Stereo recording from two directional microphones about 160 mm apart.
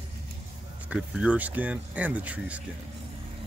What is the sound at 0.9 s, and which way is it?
Speech, 5° right (ahead or behind).